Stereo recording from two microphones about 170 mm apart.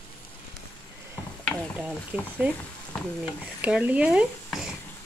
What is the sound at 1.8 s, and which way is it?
Speech, 10° right (ahead or behind).